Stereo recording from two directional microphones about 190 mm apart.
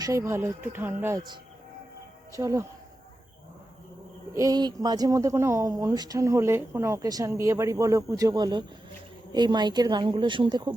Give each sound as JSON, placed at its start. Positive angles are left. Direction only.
{"t": 0.0, "sound": "speech", "side_deg": -15}
{"t": 4.4, "sound": "a woman's voice", "side_deg": -20}